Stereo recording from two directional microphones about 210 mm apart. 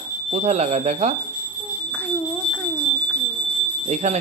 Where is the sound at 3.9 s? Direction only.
35° right (ahead or behind).